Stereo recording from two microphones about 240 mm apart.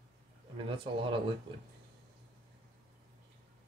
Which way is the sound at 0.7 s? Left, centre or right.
Right.